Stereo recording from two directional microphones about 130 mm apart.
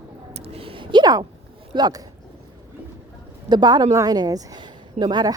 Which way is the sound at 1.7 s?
30° right (ahead or behind).